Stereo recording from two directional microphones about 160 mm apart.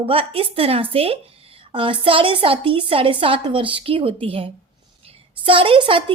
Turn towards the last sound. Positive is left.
turn(degrees=-30)  # may be behind; listen again after turning